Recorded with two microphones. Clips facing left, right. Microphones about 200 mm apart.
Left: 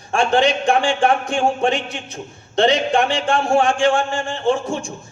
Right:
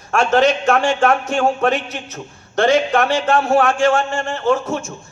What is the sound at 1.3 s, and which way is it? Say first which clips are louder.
A man's voice: right 1 dB; 20° left (ahead or behind).